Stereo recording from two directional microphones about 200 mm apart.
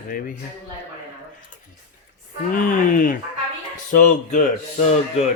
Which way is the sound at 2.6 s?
45° left (ahead or behind).